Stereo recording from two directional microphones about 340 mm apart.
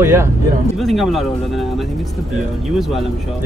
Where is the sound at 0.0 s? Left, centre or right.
Centre.